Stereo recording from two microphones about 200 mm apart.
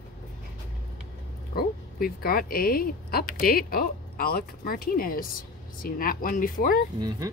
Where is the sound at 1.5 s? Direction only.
50° left (ahead or behind).